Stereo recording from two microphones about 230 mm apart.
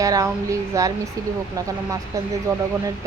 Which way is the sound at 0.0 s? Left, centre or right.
Centre.